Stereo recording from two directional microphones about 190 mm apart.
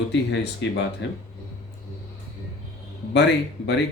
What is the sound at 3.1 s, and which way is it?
Speech, 65° left (ahead or behind).